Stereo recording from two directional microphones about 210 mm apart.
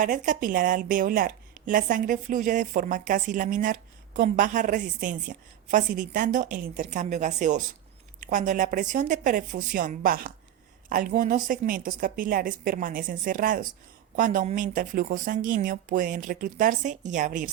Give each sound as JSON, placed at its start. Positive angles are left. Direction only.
{"t": 0.0, "sound": "a woman's voice", "side_deg": -40}